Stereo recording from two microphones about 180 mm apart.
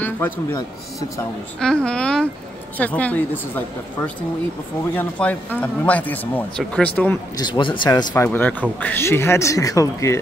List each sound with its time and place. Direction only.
0.0 s a man's voice: 10° left (ahead or behind)
1.6 s speech: 5° left (ahead or behind)
7.3 s speech: 25° left (ahead or behind)
8.1 s speech: 10° left (ahead or behind)